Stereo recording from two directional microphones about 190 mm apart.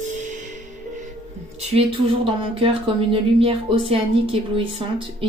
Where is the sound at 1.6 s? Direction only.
30° right (ahead or behind).